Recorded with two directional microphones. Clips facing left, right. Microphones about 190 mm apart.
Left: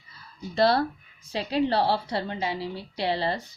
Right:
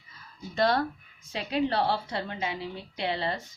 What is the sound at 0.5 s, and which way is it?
A woman's voice, 35° left (ahead or behind).